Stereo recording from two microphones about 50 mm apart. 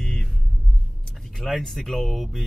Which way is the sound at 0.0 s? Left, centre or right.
Centre.